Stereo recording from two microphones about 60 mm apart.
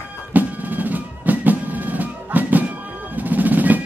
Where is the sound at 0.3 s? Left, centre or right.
Right.